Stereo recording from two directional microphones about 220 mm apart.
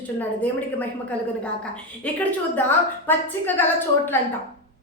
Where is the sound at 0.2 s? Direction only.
5° left (ahead or behind).